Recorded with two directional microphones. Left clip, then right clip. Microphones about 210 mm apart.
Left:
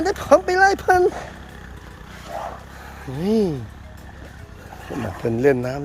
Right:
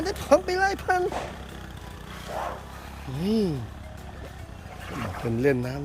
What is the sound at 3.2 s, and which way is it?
Speech, 15° left (ahead or behind).